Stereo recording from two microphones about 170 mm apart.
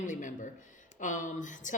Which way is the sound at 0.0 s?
50° left (ahead or behind).